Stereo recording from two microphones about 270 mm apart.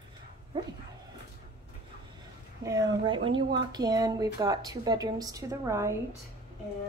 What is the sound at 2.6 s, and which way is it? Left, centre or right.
Speech, centre.